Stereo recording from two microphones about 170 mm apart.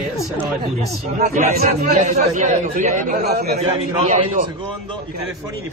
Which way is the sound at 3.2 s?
70° right (ahead or behind).